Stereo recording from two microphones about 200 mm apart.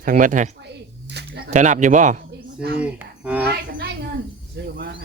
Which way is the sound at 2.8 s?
5° right (ahead or behind).